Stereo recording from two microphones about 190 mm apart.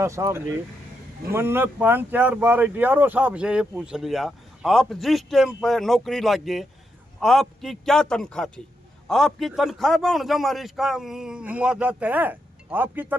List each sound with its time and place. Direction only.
0.0 s speech: 15° right (ahead or behind)